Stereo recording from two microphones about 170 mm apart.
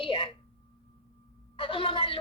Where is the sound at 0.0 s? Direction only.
30° left (ahead or behind).